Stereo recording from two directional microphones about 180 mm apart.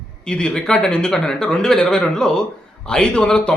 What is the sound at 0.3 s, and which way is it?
A man's voice, 5° left (ahead or behind).